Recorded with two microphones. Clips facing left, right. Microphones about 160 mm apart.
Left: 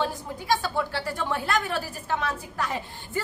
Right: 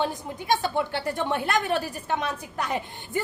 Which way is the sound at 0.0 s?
20° right (ahead or behind).